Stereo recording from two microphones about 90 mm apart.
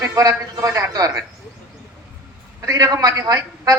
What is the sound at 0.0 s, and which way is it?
Speech, 40° right (ahead or behind).